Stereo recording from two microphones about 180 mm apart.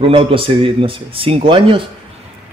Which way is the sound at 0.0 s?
30° right (ahead or behind).